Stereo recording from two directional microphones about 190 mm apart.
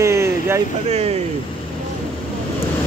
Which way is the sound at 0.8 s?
35° right (ahead or behind).